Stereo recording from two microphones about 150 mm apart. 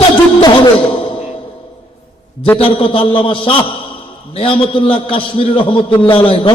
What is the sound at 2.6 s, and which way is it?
A man's voice, 40° left (ahead or behind).